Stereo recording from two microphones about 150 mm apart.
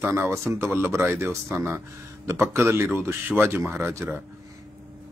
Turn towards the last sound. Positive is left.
turn(degrees=-15)  # may be behind; listen again after turning